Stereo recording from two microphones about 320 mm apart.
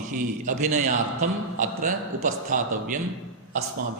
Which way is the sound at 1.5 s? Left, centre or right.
Right.